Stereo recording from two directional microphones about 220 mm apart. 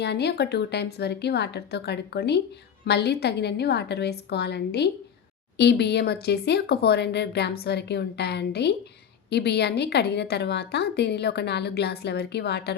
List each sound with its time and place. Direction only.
0.0 s a woman's voice: 50° left (ahead or behind)